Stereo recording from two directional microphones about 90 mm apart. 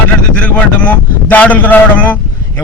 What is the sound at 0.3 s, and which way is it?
A man's voice, 15° left (ahead or behind).